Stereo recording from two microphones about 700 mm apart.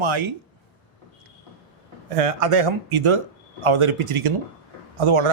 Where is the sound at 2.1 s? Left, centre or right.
Right.